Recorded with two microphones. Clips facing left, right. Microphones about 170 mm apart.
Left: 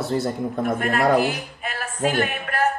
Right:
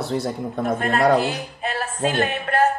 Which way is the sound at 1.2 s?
25° right (ahead or behind).